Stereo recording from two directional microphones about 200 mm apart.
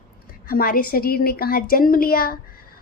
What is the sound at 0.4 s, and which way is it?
A woman's voice, 45° left (ahead or behind).